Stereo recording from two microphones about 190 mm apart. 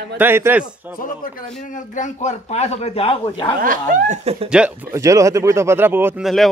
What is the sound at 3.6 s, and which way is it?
Speech, 40° right (ahead or behind).